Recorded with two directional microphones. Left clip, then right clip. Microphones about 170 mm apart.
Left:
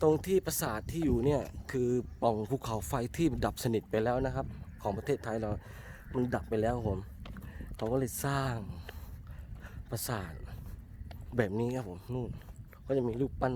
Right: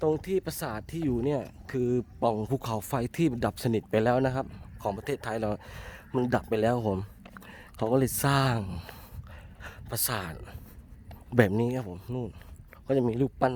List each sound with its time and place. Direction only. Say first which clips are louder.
0.0 s speech: even; 10° left (ahead or behind); by 4.0 s 30° right (ahead or behind)
4.0 s speech: right 6 dB; 45° right (ahead or behind)
11.5 s speech: right 5 dB; 30° right (ahead or behind)
12.9 s a man's voice: right 5 dB; 35° right (ahead or behind)